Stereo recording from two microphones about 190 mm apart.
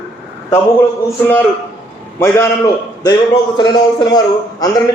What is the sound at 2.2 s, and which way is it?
A man's voice, 15° left (ahead or behind).